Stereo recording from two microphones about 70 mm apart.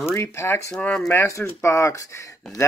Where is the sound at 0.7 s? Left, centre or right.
Centre.